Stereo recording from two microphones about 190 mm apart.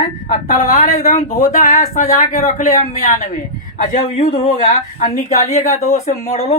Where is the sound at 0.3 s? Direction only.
40° left (ahead or behind).